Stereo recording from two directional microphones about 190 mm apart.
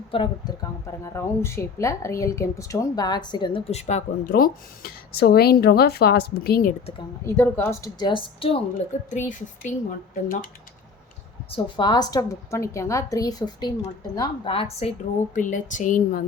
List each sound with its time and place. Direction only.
0.1 s speech: 25° left (ahead or behind)
4.3 s a woman's voice: 50° left (ahead or behind)
7.3 s speech: 10° left (ahead or behind); by 8.6 s 30° left (ahead or behind)
9.0 s a woman's voice: 40° left (ahead or behind)
11.5 s a woman's voice: 25° left (ahead or behind)
15.4 s a woman's voice: 40° left (ahead or behind)